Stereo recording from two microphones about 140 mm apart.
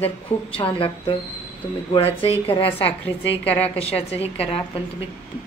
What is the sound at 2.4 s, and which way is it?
Speech, 40° left (ahead or behind).